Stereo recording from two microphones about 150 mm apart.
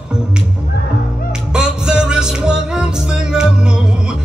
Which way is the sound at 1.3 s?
5° right (ahead or behind).